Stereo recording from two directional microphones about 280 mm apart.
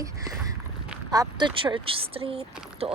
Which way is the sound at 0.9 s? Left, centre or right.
Centre.